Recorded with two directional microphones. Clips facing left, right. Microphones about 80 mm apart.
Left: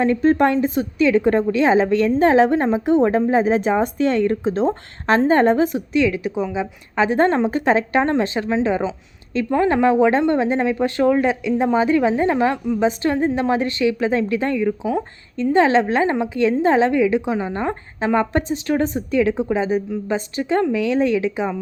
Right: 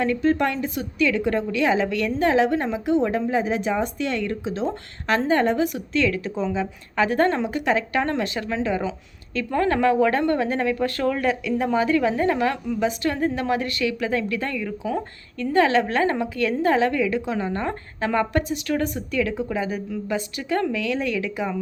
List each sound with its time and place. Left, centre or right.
0.0 s a woman's voice: left
5.9 s a woman's voice: centre